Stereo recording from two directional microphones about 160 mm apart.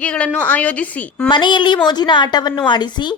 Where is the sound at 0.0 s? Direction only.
10° left (ahead or behind).